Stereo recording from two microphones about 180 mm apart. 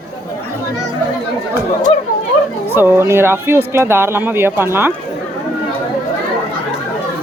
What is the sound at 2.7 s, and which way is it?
A woman's voice, 15° right (ahead or behind).